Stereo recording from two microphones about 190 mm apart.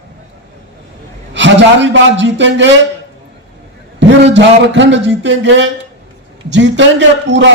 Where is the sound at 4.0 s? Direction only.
70° right (ahead or behind).